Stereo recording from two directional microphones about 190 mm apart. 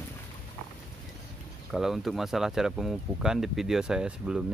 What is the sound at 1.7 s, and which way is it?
Speech, centre (ahead or behind).